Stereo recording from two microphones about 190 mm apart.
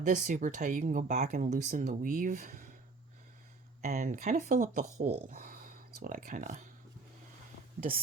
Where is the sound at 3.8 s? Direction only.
35° right (ahead or behind).